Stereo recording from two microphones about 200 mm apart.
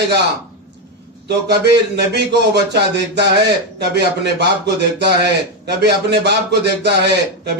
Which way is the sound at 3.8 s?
60° right (ahead or behind).